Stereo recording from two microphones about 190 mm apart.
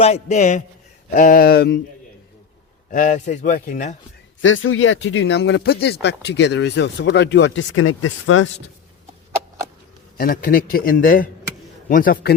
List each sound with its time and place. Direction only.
0.0 s a man's voice: 35° left (ahead or behind); by 1.8 s 55° left (ahead or behind)
2.9 s a man's voice: 45° left (ahead or behind)
4.4 s speech: 90° left
10.2 s a man's voice: 50° left (ahead or behind)